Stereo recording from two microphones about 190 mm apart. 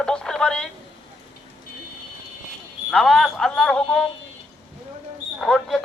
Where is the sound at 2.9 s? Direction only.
Centre (ahead or behind).